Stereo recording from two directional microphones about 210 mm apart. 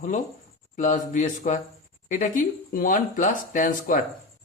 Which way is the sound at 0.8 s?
35° left (ahead or behind).